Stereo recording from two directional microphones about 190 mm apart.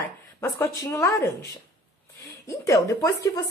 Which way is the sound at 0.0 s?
15° left (ahead or behind).